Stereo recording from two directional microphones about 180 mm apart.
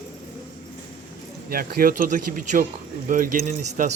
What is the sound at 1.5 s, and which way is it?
Speech, 55° right (ahead or behind).